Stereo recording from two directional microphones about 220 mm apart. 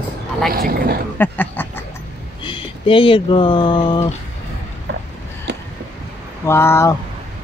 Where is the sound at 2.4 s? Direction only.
25° left (ahead or behind).